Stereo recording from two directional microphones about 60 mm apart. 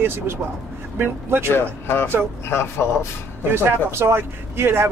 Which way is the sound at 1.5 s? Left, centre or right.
Left.